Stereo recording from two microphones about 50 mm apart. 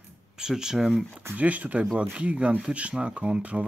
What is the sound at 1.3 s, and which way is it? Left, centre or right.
Speech, right.